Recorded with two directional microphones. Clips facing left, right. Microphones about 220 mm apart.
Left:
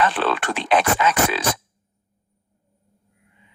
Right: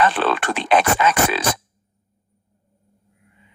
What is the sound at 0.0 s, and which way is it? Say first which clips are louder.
Speech: right 2 dB; 55° right (ahead or behind).